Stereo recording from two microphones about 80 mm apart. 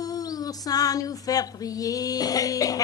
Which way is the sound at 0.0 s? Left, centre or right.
Left.